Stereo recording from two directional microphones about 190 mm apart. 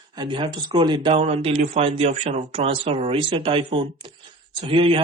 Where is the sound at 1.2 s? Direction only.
35° right (ahead or behind).